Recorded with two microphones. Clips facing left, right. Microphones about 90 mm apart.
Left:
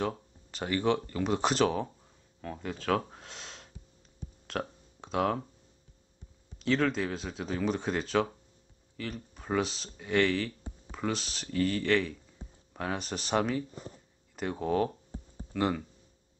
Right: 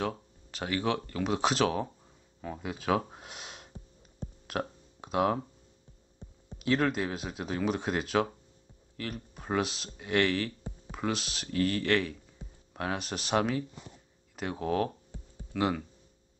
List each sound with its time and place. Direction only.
0.0 s speech: centre (ahead or behind)
6.6 s speech: 5° right (ahead or behind)
12.4 s a sound: 30° left (ahead or behind)
12.7 s speech: centre (ahead or behind)